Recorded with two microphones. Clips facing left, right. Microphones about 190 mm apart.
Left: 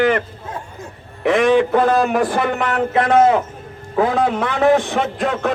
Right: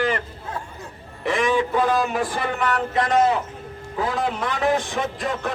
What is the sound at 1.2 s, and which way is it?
A man's voice, 60° left (ahead or behind).